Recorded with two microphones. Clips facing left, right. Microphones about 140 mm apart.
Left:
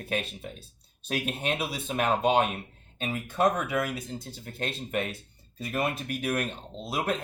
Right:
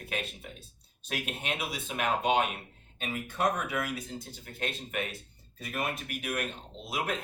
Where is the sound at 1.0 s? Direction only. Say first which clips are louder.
Left 6 dB; 35° left (ahead or behind).